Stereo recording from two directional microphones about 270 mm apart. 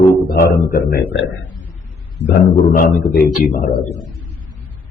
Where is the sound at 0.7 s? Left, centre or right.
Left.